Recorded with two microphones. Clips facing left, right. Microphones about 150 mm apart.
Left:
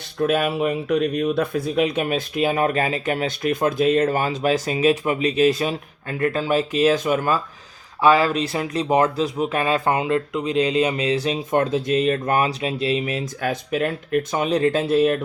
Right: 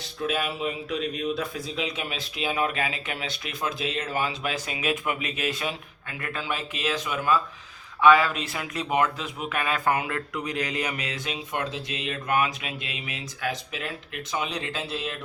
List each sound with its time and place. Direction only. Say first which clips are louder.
0.2 s speech: left 8 dB; 55° left (ahead or behind)
8.0 s speech: left 2 dB; 35° left (ahead or behind); by 15.2 s 50° left (ahead or behind)